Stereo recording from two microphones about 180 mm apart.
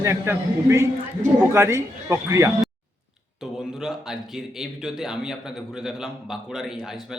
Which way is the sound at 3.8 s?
5° right (ahead or behind).